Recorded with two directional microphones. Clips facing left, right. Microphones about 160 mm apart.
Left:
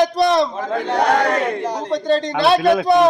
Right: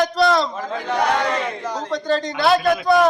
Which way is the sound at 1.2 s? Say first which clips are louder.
Left 4 dB; 50° left (ahead or behind).